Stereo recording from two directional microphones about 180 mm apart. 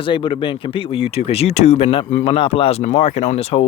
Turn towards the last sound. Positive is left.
turn(degrees=35)  # may be behind; listen again after turning